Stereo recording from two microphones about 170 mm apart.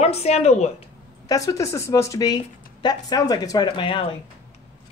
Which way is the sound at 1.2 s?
20° left (ahead or behind).